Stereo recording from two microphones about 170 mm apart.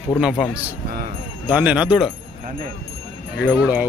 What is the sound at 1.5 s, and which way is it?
Speech, 5° right (ahead or behind).